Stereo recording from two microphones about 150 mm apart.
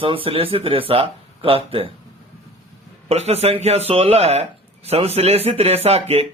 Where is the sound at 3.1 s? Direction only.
45° right (ahead or behind).